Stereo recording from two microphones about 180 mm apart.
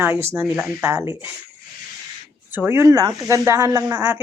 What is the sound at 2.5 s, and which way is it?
Speech, 10° right (ahead or behind).